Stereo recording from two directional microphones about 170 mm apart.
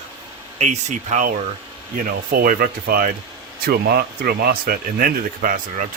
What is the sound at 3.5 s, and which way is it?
Speech, 70° right (ahead or behind).